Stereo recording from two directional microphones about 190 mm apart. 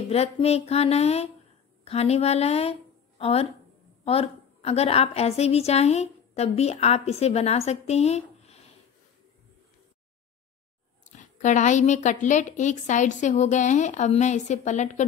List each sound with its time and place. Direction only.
0.1 s a woman's voice: 35° left (ahead or behind)
11.1 s a woman's voice: 40° left (ahead or behind)